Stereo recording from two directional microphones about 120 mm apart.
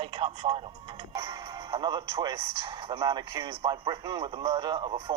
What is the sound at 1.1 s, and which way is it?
Music, 50° right (ahead or behind).